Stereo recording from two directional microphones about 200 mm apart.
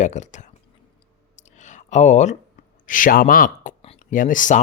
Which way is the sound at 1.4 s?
35° left (ahead or behind).